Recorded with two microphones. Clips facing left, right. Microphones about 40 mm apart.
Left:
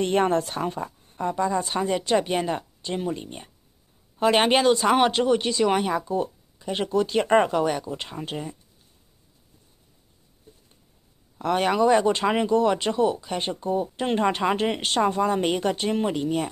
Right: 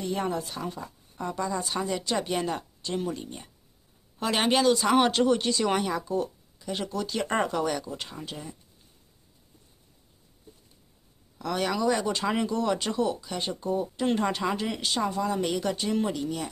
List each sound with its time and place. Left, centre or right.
0.0 s a woman's voice: left
0.8 s speech: left
4.9 s speech: centre
11.3 s speech: left
12.4 s speech: left